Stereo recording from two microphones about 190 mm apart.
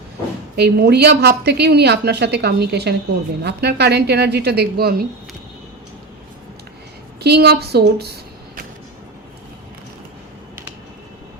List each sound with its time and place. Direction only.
0.5 s a woman's voice: 60° right (ahead or behind)
7.2 s a woman's voice: 60° right (ahead or behind)